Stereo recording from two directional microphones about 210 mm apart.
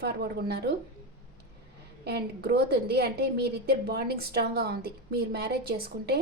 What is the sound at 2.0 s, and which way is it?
A woman's voice, 50° right (ahead or behind).